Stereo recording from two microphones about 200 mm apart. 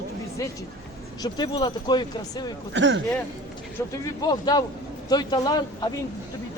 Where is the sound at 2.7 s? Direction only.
65° right (ahead or behind).